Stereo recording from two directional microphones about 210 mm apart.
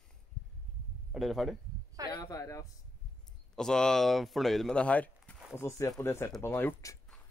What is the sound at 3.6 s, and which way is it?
Speech, 5° left (ahead or behind).